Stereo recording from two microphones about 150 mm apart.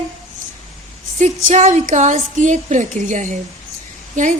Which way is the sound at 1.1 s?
55° right (ahead or behind).